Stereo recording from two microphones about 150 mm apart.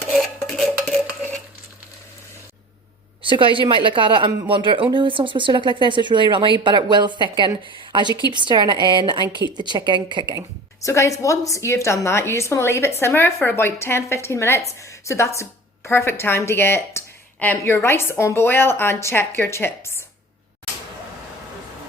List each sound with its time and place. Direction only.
0.1 s stir: centre (ahead or behind)
3.2 s speech: 35° right (ahead or behind)
10.8 s a woman's voice: 20° left (ahead or behind)